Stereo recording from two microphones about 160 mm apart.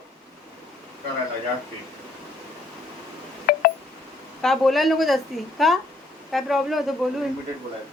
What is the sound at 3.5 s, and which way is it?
Telephone dialing, 70° left (ahead or behind).